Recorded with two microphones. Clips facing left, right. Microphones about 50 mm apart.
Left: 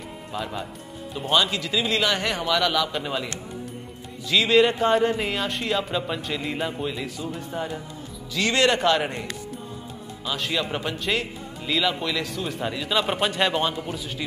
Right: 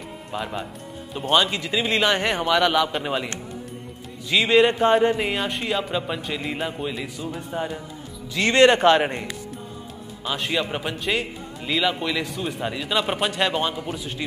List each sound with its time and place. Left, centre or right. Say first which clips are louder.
0.3 s a man's voice: right 2 dB; centre
4.3 s speech: right 1 dB; centre
8.3 s a man's voice: right 5 dB; right
10.2 s a man's voice: right 2 dB; centre